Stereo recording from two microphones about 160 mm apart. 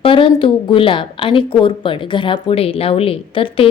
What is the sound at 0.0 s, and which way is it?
A woman's voice, 35° left (ahead or behind).